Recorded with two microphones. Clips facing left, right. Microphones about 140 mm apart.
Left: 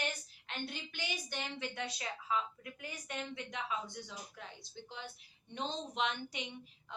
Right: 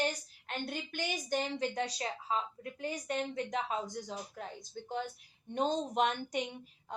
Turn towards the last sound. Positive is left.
turn(degrees=-45)  # may be behind; listen again after turning